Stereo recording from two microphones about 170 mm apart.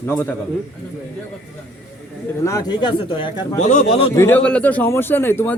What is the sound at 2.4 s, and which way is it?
Speech, 20° left (ahead or behind).